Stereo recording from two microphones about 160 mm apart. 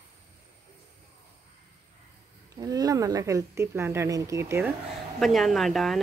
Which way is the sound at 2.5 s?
25° right (ahead or behind).